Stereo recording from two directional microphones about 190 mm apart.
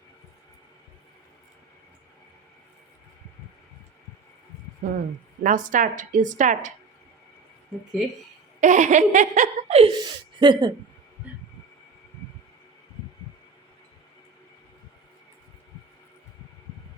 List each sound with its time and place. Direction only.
4.8 s a woman's voice: 45° right (ahead or behind)
8.6 s speech: 40° right (ahead or behind); by 10.7 s 25° right (ahead or behind)